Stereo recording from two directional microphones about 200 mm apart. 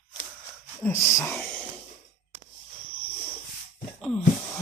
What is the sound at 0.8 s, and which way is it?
Speech, 10° left (ahead or behind).